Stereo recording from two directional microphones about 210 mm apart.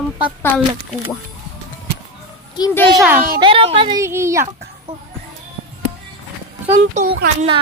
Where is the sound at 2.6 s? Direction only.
15° left (ahead or behind).